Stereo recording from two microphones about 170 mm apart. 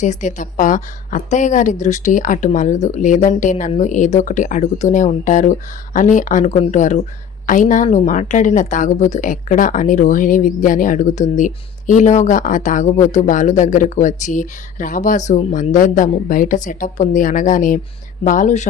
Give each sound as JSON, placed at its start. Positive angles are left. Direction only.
{"t": 0.0, "sound": "a woman's voice", "side_deg": 45}